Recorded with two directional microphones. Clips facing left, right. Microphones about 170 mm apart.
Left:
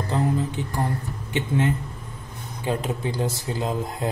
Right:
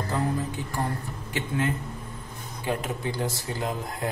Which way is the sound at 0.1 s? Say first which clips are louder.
Left 4 dB; 25° left (ahead or behind).